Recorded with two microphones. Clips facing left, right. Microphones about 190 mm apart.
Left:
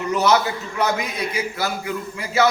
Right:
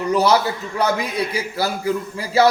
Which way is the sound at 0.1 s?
35° right (ahead or behind).